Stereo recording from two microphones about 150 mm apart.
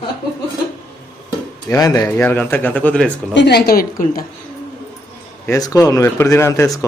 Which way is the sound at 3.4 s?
90° left.